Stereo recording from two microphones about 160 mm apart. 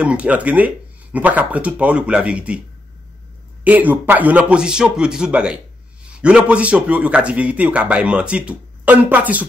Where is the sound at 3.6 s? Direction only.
10° right (ahead or behind).